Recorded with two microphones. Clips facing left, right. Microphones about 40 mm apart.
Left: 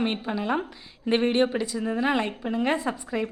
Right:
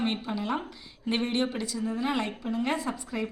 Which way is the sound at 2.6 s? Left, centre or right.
Left.